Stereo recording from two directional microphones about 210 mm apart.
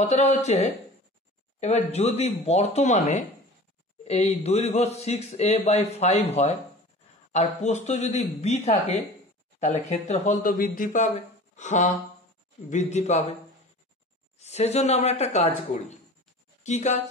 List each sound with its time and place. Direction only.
0.0 s speech: 30° left (ahead or behind)
14.4 s speech: 30° left (ahead or behind)